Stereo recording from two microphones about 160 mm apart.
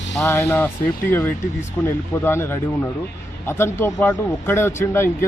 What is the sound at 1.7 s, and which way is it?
A man's voice, 15° left (ahead or behind).